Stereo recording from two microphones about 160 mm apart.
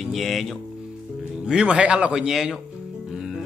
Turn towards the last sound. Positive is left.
turn(degrees=-5)  # may be behind; listen again after turning